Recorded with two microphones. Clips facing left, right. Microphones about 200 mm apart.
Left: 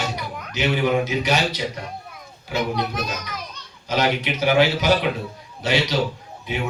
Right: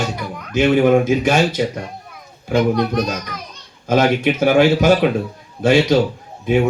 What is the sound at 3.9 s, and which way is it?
Speech, 50° right (ahead or behind).